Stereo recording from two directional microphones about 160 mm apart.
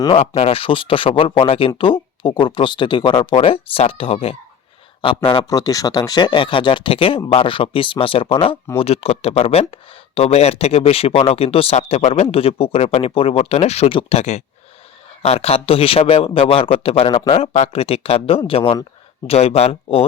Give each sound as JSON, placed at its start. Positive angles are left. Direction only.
{"t": 0.0, "sound": "speech", "side_deg": 35}